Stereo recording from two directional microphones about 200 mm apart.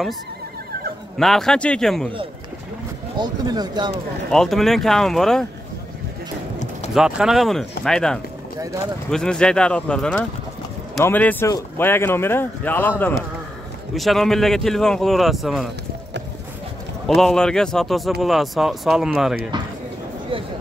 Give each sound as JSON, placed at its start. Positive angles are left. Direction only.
{"t": 1.1, "sound": "speech", "side_deg": 0}
{"t": 3.2, "sound": "speech", "side_deg": -20}
{"t": 4.3, "sound": "speech", "side_deg": 0}
{"t": 6.9, "sound": "speech", "side_deg": -5}
{"t": 13.9, "sound": "speech", "side_deg": 0}
{"t": 17.1, "sound": "speech", "side_deg": 0}